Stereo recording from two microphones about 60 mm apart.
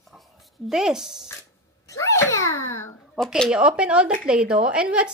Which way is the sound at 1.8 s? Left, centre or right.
Left.